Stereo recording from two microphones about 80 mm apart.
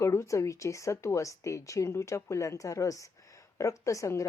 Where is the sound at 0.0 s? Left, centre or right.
Left.